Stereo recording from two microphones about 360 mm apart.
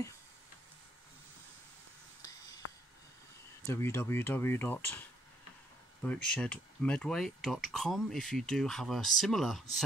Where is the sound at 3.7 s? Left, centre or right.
Centre.